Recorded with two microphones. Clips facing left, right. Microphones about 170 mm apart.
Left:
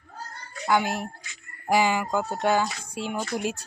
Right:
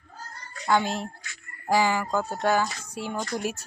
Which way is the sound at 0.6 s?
10° left (ahead or behind).